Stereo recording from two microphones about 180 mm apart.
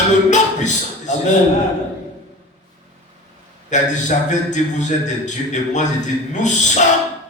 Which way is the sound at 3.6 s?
40° left (ahead or behind).